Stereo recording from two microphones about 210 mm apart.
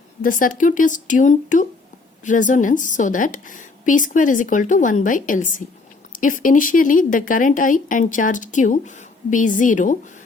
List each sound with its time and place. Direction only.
0.2 s speech: 40° left (ahead or behind)